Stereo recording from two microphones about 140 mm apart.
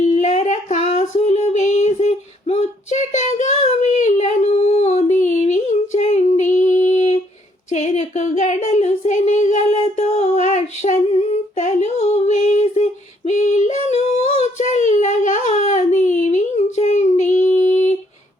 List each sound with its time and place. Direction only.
0.0 s female singing: 55° left (ahead or behind)
7.7 s child singing: 60° left (ahead or behind)
13.8 s child singing: 50° left (ahead or behind)